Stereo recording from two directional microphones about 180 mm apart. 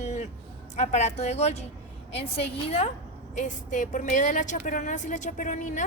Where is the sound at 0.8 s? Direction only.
40° left (ahead or behind).